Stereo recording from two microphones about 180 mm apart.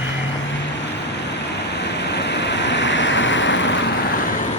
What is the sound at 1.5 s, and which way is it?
Waves, 70° left (ahead or behind).